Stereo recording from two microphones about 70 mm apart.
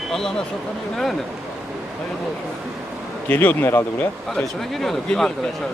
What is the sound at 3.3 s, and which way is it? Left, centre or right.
Speech, left.